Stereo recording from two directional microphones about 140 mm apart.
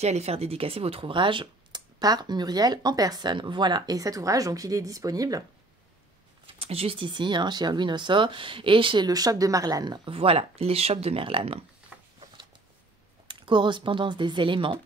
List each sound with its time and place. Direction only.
0.0 s speech: 50° right (ahead or behind); by 5.4 s 25° right (ahead or behind)
6.4 s speech: 45° right (ahead or behind); by 9.9 s 25° right (ahead or behind)
10.0 s speech: 40° right (ahead or behind)
13.3 s speech: 35° right (ahead or behind)